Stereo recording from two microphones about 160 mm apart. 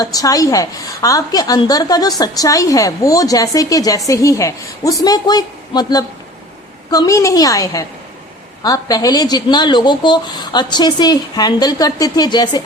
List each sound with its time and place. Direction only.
0.0 s a woman's voice: 25° left (ahead or behind)